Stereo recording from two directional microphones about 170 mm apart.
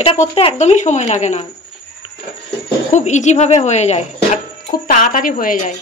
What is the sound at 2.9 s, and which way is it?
Speech, 45° left (ahead or behind).